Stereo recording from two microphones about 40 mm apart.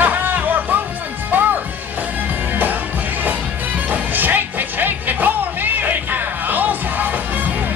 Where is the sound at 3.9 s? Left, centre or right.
Right.